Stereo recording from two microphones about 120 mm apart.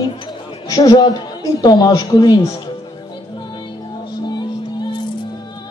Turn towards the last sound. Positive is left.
turn(degrees=35)  # may be behind; listen again after turning